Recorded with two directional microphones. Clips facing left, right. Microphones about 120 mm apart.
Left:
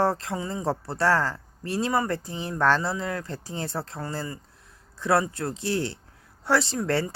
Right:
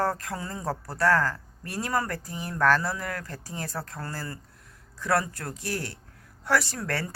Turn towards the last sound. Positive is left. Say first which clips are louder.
# left 6 dB
turn(degrees=25)  # may be behind; listen again after turning